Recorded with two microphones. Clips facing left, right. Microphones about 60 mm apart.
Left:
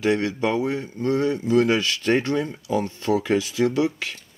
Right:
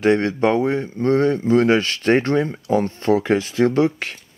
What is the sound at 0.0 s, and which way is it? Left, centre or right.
Speech, right.